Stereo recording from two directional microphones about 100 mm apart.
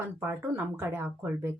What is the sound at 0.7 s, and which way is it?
Speech, 25° right (ahead or behind).